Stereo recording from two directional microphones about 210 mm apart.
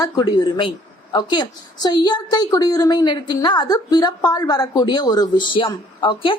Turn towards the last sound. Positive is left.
turn(degrees=25)  # may be behind; listen again after turning